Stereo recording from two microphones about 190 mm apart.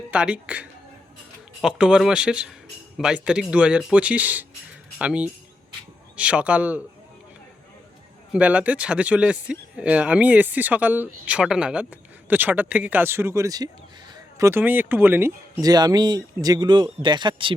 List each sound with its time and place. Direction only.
0.1 s speech: 5° right (ahead or behind)
8.3 s speech: 5° right (ahead or behind); by 17.5 s 25° right (ahead or behind)